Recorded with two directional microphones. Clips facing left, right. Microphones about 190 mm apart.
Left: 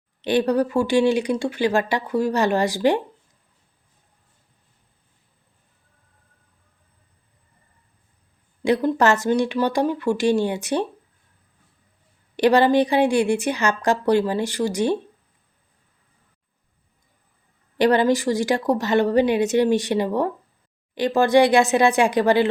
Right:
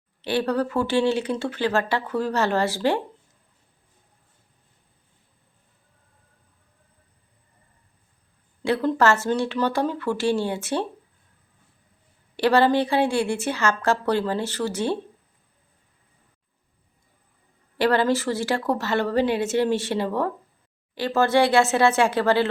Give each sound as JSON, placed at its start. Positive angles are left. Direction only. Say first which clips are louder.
{"t": 0.2, "sound": "speech", "louder": "left 4 dB", "side_deg": 20}
{"t": 8.6, "sound": "speech", "louder": "left 2 dB", "side_deg": 15}
{"t": 12.4, "sound": "speech", "louder": "left 3 dB", "side_deg": 15}
{"t": 17.7, "sound": "speech", "louder": "left 3 dB", "side_deg": 15}